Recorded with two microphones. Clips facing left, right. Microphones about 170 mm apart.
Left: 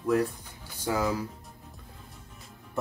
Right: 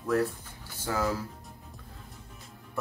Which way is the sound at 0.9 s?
15° left (ahead or behind).